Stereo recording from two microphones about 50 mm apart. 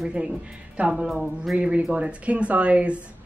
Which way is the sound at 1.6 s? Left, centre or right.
Right.